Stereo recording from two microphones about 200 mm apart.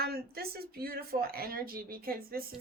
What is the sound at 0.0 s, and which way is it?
Speech, 50° right (ahead or behind).